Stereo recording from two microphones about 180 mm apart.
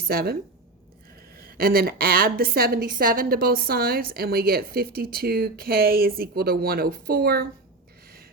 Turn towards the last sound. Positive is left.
turn(degrees=-55)  # may be behind; listen again after turning